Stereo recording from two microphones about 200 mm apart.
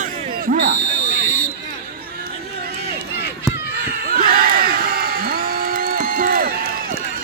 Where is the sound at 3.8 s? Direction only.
50° right (ahead or behind).